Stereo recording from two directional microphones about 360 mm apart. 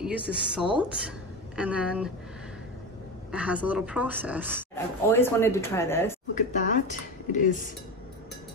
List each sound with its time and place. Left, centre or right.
0.0 s speech: centre
3.3 s speech: centre
4.7 s speech: centre
6.3 s speech: left